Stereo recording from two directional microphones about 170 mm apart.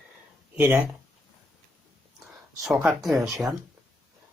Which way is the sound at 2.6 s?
Centre (ahead or behind).